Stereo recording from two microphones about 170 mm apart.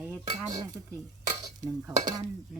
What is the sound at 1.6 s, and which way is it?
Dishes, 20° right (ahead or behind).